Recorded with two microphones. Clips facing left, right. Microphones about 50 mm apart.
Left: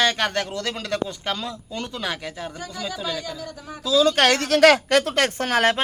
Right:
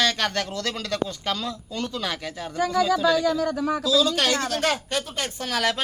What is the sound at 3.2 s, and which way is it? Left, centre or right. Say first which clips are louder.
Speech: right 11 dB; right.